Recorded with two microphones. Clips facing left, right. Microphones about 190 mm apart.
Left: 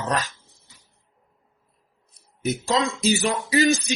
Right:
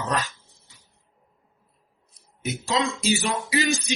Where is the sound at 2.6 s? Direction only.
45° left (ahead or behind).